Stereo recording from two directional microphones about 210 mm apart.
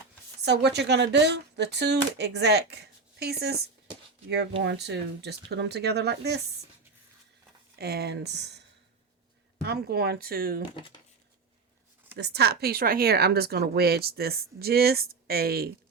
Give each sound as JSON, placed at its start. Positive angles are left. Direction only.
{"t": 0.4, "sound": "speech", "side_deg": -55}
{"t": 7.8, "sound": "speech", "side_deg": -50}
{"t": 9.6, "sound": "speech", "side_deg": -50}
{"t": 12.1, "sound": "speech", "side_deg": -50}